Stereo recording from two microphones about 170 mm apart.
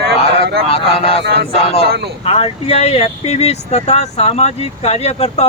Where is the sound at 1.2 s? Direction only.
90° right.